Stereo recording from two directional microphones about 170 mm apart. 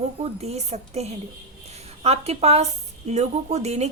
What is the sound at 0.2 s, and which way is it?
Speech, 40° right (ahead or behind).